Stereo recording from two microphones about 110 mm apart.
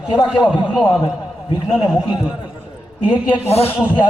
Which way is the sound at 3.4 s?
65° left (ahead or behind).